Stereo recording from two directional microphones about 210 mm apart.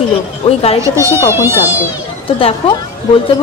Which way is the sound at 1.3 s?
10° right (ahead or behind).